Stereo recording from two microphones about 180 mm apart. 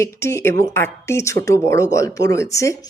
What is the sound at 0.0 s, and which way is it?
Speech, 15° left (ahead or behind).